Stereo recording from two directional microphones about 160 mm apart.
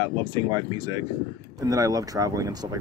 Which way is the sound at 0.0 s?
30° right (ahead or behind).